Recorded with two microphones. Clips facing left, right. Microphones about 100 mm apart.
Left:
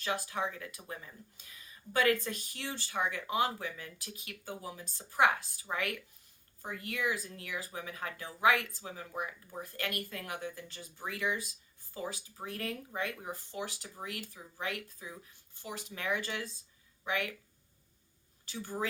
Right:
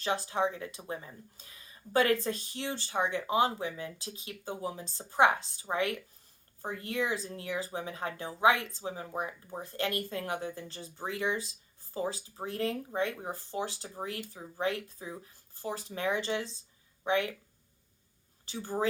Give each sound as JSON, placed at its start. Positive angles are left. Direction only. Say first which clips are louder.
{"t": 0.0, "sound": "speech", "louder": "right 5 dB", "side_deg": -30}
{"t": 18.4, "sound": "speech", "louder": "right 4 dB", "side_deg": -30}